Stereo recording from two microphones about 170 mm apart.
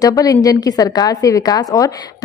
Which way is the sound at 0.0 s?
20° left (ahead or behind).